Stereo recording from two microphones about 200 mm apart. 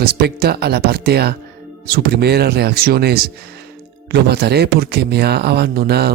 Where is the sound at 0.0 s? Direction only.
55° right (ahead or behind).